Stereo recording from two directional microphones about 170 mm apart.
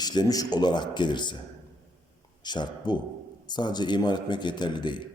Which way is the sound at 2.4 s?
25° left (ahead or behind).